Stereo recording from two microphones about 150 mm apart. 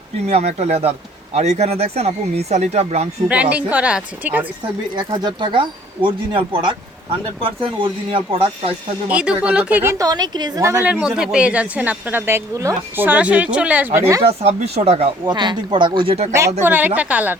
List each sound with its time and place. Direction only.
0.3 s speech: 45° right (ahead or behind)
3.2 s speech: 10° right (ahead or behind)
4.9 s speech: 30° right (ahead or behind)
9.0 s speech: 5° right (ahead or behind)
11.0 s speech: 5° right (ahead or behind); by 14.3 s 20° right (ahead or behind)
14.3 s speech: 45° right (ahead or behind)
15.3 s speech: 30° right (ahead or behind)
16.6 s speech: 10° right (ahead or behind)